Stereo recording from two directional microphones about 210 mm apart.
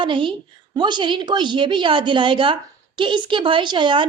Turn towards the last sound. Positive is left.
turn(degrees=-20)  # may be behind; listen again after turning